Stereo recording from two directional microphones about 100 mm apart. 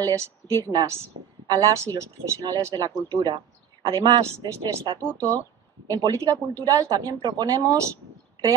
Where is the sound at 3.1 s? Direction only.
45° right (ahead or behind).